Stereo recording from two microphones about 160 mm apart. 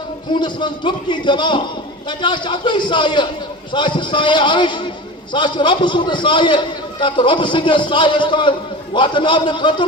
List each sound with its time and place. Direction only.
0.3 s a man's voice: 30° left (ahead or behind)